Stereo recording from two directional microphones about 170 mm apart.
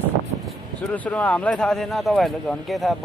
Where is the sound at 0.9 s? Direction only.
10° left (ahead or behind).